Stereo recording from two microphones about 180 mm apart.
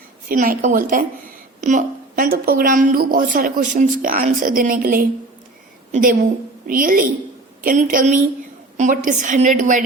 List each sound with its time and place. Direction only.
0.3 s a woman's voice: 50° right (ahead or behind)